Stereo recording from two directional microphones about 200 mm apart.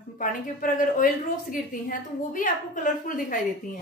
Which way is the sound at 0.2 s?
40° left (ahead or behind).